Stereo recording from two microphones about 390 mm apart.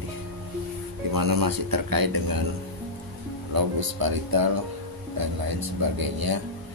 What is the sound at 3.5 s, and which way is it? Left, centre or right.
A man's voice, right.